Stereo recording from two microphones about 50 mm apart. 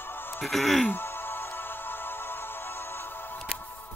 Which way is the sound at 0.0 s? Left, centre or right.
Left.